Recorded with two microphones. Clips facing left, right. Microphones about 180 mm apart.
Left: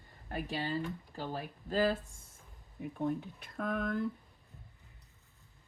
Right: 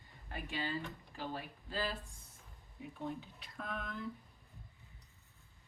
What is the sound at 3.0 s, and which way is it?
Speech, 50° left (ahead or behind).